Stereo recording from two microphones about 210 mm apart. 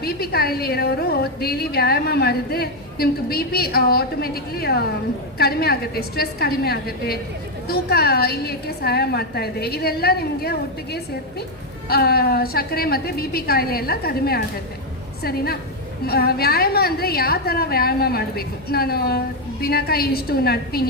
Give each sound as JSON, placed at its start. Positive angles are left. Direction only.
{"t": 0.0, "sound": "a woman's voice", "side_deg": 45}